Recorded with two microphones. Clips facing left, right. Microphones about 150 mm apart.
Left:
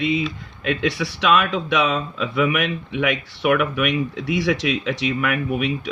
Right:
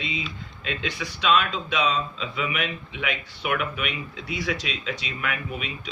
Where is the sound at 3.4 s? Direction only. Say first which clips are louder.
Left 9 dB; 90° left.